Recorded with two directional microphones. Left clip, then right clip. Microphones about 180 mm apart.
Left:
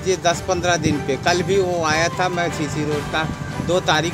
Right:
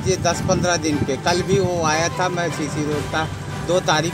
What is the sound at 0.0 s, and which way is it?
Speech, 35° left (ahead or behind).